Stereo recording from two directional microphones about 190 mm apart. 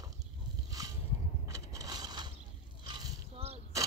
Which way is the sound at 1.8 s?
20° right (ahead or behind).